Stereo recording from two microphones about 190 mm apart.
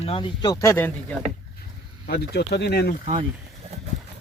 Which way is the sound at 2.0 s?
60° left (ahead or behind).